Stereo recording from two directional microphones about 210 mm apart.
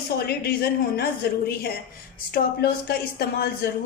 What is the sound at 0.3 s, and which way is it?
A woman's voice, 50° left (ahead or behind).